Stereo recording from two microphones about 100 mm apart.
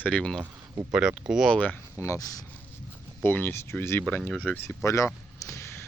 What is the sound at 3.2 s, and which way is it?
Speech, 20° left (ahead or behind).